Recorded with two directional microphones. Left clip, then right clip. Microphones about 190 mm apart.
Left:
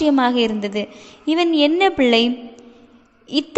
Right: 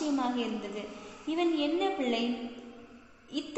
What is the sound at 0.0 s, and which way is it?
A woman's voice, 45° left (ahead or behind).